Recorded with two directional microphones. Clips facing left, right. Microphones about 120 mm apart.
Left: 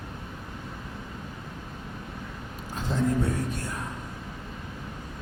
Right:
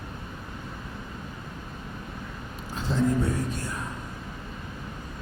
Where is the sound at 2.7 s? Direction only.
50° left (ahead or behind).